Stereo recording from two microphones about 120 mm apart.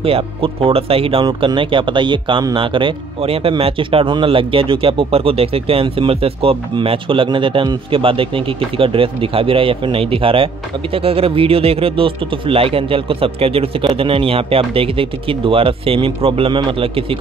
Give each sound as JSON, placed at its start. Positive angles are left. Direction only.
{"t": 0.0, "sound": "speech", "side_deg": -50}